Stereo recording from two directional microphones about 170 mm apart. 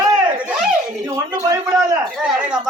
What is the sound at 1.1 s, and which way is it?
Speech, 20° right (ahead or behind).